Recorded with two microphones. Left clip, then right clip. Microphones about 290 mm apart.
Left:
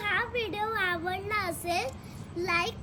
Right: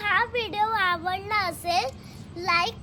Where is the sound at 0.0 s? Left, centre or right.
Centre.